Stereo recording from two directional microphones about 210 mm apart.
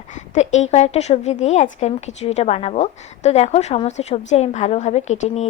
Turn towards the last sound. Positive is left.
turn(degrees=35)  # may be behind; listen again after turning